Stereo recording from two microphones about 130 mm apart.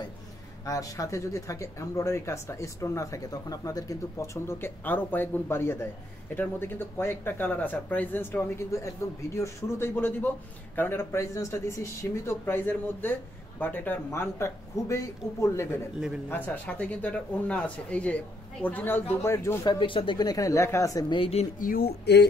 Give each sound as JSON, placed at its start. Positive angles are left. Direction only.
{"t": 0.7, "sound": "speech", "side_deg": 25}
{"t": 19.6, "sound": "speech", "side_deg": 35}
{"t": 21.1, "sound": "speech", "side_deg": 45}
{"t": 21.7, "sound": "speech", "side_deg": 90}